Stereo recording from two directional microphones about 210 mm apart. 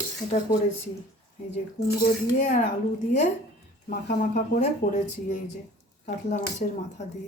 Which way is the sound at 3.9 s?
40° left (ahead or behind).